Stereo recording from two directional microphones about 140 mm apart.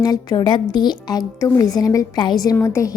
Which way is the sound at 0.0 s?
30° left (ahead or behind).